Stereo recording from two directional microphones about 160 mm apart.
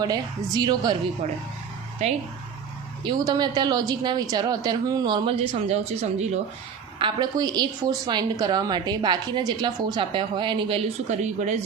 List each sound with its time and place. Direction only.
0.0 s a woman's voice: 25° right (ahead or behind)
1.2 s a woman's voice: 45° right (ahead or behind)
3.0 s a woman's voice: 25° right (ahead or behind); by 6.3 s 40° right (ahead or behind)
7.0 s a woman's voice: 25° right (ahead or behind)
11.2 s a woman's voice: 50° right (ahead or behind)